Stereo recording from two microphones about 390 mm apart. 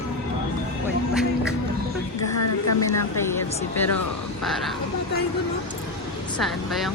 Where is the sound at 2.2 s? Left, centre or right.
Left.